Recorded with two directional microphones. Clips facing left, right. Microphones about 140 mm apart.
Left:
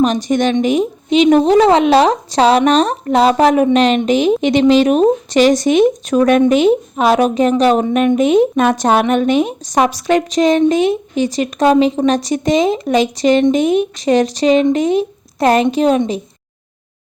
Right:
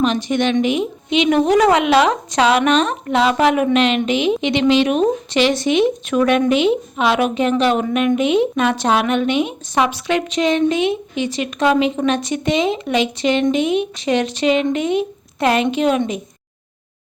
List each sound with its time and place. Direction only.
0.0 s a woman's voice: 40° left (ahead or behind)